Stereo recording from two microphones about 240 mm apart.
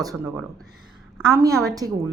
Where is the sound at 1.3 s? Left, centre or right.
Centre.